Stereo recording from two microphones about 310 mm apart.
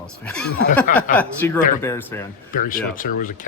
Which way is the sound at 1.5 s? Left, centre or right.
Left.